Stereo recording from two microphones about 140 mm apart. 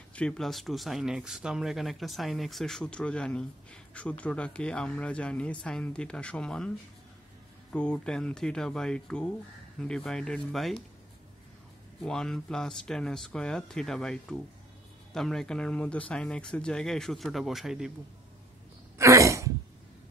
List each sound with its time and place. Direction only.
0.1 s speech: 5° left (ahead or behind)
7.7 s speech: 10° left (ahead or behind)
12.0 s speech: 5° left (ahead or behind)
18.9 s throat clearing: 20° right (ahead or behind)